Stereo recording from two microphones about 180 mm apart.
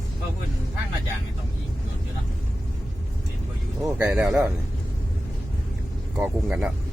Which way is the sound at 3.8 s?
10° right (ahead or behind).